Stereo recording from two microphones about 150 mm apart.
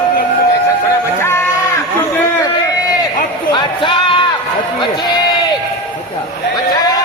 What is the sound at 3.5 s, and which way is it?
Music, 30° left (ahead or behind).